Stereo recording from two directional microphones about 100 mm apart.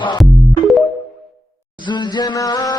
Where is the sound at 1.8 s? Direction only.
50° left (ahead or behind).